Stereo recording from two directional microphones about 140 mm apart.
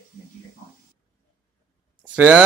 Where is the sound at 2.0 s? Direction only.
10° right (ahead or behind).